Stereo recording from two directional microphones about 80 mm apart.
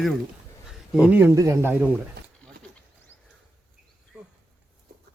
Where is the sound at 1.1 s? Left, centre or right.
Right.